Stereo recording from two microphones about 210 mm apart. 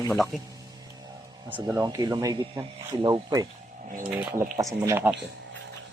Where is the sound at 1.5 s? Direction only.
10° right (ahead or behind).